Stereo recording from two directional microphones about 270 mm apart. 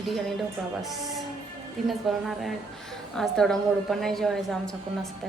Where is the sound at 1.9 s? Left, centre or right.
Centre.